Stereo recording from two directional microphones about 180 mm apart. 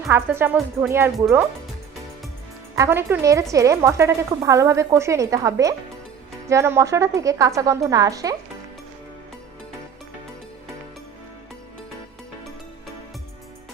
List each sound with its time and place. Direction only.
0.1 s speech: 15° right (ahead or behind)
2.7 s speech: 15° right (ahead or behind)